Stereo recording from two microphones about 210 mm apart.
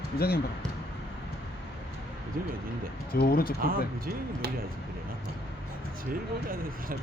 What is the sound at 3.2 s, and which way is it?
Speech, 45° left (ahead or behind).